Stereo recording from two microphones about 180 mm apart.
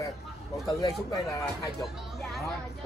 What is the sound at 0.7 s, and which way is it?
Speech, 20° left (ahead or behind).